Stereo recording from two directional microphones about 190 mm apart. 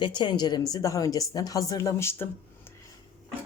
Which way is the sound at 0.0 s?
25° left (ahead or behind).